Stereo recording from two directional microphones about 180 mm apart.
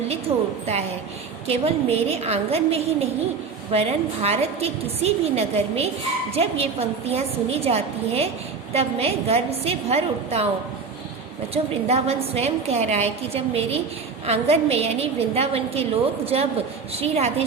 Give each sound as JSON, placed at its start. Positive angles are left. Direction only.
{"t": 0.1, "sound": "a sound", "side_deg": -35}
{"t": 1.5, "sound": "a woman's voice", "side_deg": -35}
{"t": 11.5, "sound": "a woman's voice", "side_deg": -35}